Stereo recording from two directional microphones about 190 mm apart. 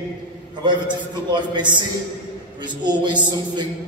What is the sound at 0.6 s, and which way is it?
A man's voice, 25° right (ahead or behind).